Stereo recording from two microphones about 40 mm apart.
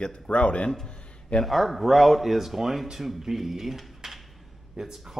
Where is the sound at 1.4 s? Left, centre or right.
Centre.